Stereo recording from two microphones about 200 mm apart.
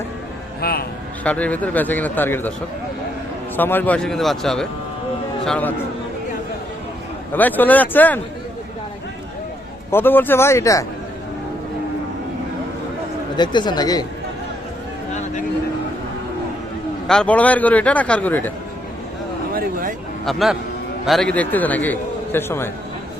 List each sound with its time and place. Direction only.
0.6 s a man's voice: 50° left (ahead or behind)
1.2 s a man's voice: 5° left (ahead or behind)
3.6 s a man's voice: 10° left (ahead or behind)
7.3 s a man's voice: 10° left (ahead or behind)
9.9 s a man's voice: 10° left (ahead or behind)
13.3 s speech: 20° left (ahead or behind)
17.1 s a man's voice: 5° left (ahead or behind)
20.2 s a man's voice: centre (ahead or behind)